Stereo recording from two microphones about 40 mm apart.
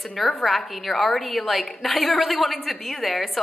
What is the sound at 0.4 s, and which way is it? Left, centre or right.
A woman's voice, centre.